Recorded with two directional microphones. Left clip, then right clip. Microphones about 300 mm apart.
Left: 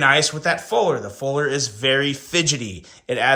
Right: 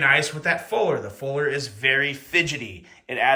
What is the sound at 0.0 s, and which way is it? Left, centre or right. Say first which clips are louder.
A man's voice: left 3 dB; centre.